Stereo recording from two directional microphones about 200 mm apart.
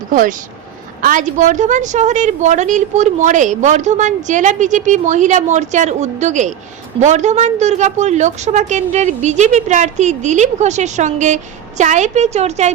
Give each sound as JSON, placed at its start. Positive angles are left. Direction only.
{"t": 0.1, "sound": "a woman's voice", "side_deg": -40}